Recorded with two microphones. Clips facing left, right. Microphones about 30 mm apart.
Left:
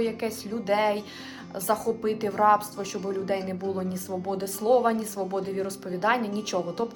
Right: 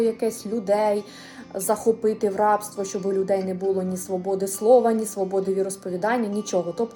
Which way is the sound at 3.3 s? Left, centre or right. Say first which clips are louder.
Right 4 dB; left.